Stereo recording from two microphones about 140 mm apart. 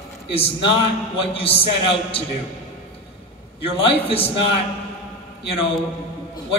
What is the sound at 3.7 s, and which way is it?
Speech, 40° left (ahead or behind).